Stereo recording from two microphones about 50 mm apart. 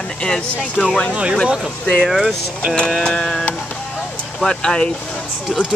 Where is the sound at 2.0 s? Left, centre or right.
Centre.